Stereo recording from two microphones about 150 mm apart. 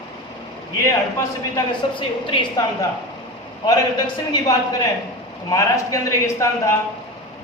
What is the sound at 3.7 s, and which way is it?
A man's voice, 25° left (ahead or behind).